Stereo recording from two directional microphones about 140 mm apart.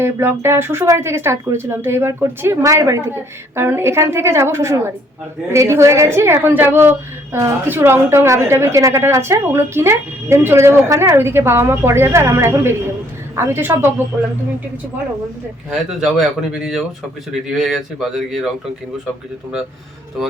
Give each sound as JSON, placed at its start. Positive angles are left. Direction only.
{"t": 0.0, "sound": "a woman's voice", "side_deg": -15}
{"t": 15.7, "sound": "speech", "side_deg": -5}